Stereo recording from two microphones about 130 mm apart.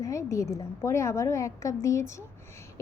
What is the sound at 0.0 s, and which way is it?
A woman's voice, 25° left (ahead or behind).